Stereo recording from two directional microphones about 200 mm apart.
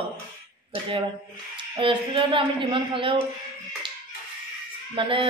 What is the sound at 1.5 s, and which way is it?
A woman's voice, 25° right (ahead or behind).